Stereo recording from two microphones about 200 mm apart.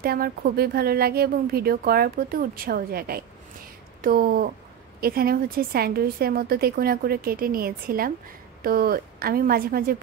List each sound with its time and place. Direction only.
0.0 s speech: 50° right (ahead or behind)